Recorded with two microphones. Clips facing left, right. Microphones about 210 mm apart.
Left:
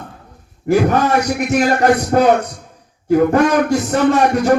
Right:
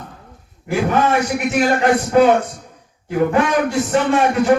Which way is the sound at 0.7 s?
45° left (ahead or behind).